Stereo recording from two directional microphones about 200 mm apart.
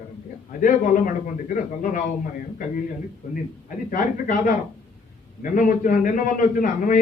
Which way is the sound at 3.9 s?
45° left (ahead or behind).